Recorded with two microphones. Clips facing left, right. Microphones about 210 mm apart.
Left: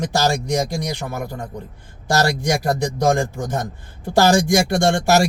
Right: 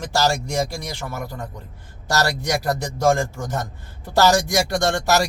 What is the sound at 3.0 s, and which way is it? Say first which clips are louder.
Speech: right 1 dB; 15° left (ahead or behind).